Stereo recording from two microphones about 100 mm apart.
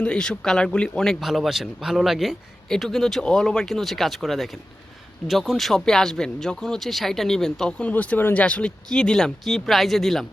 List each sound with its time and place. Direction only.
0.0 s speech: 10° left (ahead or behind)